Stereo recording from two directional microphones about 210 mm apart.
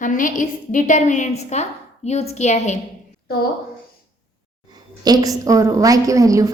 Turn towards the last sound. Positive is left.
turn(degrees=-15)  # may be behind; listen again after turning